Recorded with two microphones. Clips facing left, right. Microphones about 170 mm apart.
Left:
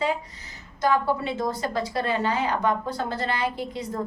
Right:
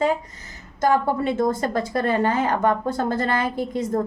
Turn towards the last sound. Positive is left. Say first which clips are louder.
# right 7 dB
turn(degrees=-50)  # may be behind; listen again after turning